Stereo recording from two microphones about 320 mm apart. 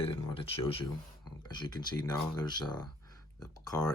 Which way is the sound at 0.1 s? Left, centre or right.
Centre.